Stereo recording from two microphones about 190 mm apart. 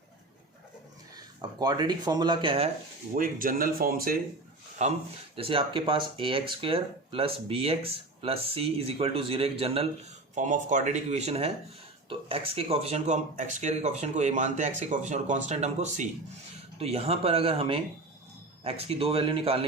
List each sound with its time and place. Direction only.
1.1 s speech: 20° right (ahead or behind)
3.2 s speech: 45° right (ahead or behind)
4.8 s speech: 35° right (ahead or behind)
10.3 s speech: 40° right (ahead or behind)